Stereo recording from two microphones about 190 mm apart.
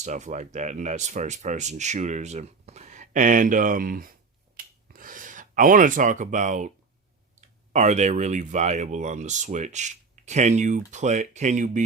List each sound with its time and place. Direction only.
0.0 s speech: 40° right (ahead or behind)
4.5 s a sound: 45° right (ahead or behind)
7.4 s speech: 40° right (ahead or behind)